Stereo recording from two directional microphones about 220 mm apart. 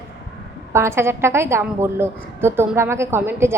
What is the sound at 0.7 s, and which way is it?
A woman's voice, 10° right (ahead or behind).